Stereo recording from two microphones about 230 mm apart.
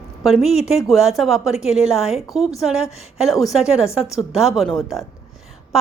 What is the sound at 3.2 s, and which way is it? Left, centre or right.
A woman's voice, centre.